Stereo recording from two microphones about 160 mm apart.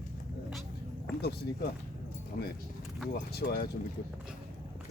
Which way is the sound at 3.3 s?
85° left.